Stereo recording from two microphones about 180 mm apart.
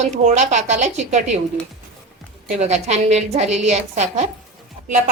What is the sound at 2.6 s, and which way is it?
A woman's voice, 40° right (ahead or behind).